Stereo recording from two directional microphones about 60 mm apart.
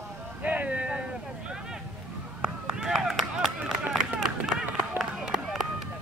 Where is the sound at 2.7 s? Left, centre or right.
Centre.